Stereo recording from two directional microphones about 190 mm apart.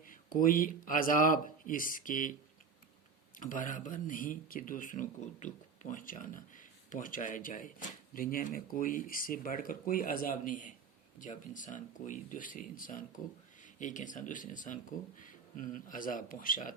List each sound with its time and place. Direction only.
0.0 s speech: 45° left (ahead or behind)
3.3 s speech: 45° left (ahead or behind)